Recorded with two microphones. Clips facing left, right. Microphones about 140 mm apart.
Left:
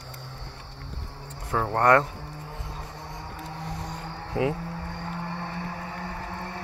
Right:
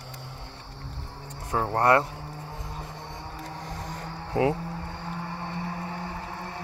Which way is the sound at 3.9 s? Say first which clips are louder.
Right 1 dB; 40° right (ahead or behind).